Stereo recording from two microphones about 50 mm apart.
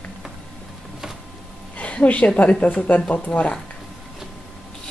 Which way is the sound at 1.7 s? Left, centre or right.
Left.